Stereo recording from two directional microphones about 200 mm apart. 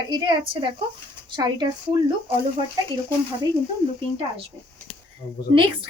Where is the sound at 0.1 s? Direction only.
25° right (ahead or behind).